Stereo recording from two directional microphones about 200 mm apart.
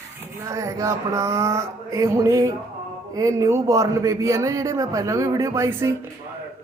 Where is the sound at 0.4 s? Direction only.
15° right (ahead or behind).